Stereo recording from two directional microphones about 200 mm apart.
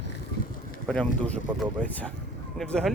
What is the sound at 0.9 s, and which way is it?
Speech, 5° left (ahead or behind).